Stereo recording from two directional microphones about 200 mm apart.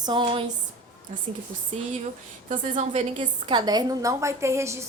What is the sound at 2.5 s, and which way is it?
Speech, 35° right (ahead or behind).